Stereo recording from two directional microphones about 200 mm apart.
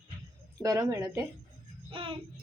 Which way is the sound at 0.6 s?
15° right (ahead or behind).